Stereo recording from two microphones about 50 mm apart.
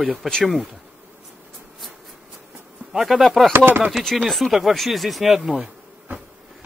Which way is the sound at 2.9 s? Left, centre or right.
Centre.